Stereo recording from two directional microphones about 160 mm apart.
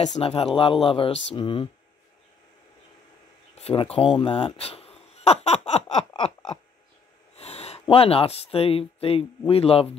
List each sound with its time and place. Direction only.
0.0 s speech: 40° left (ahead or behind)
3.5 s a sound: 40° left (ahead or behind)
7.3 s speech: 40° left (ahead or behind)